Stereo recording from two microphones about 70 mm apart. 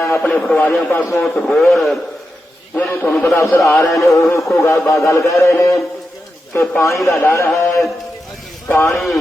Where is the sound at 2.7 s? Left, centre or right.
Left.